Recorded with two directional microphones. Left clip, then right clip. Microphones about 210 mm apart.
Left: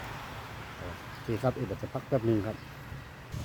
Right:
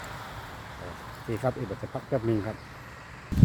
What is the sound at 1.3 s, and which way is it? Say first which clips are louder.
Speech: right 1 dB; centre (ahead or behind).